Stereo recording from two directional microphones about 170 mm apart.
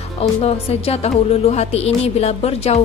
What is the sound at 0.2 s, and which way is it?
A woman's voice, 35° left (ahead or behind).